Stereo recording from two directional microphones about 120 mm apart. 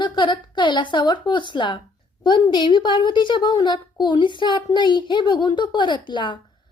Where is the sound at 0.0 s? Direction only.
40° left (ahead or behind).